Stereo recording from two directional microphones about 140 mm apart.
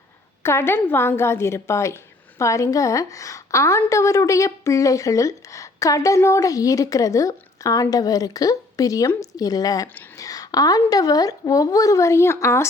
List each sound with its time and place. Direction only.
0.4 s a woman's voice: 15° left (ahead or behind)